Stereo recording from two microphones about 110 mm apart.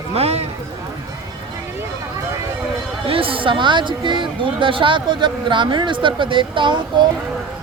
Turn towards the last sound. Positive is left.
turn(degrees=-45)  # may be behind; listen again after turning